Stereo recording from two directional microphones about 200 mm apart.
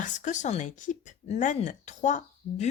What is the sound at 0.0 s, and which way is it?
Speech, 40° left (ahead or behind).